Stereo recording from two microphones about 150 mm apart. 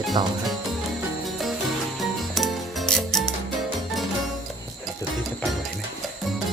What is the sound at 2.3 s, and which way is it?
Mechanisms, centre (ahead or behind).